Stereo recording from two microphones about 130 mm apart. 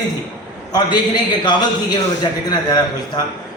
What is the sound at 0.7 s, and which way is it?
A man's voice, 35° left (ahead or behind).